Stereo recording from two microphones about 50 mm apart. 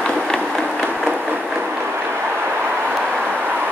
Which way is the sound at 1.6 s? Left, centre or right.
Right.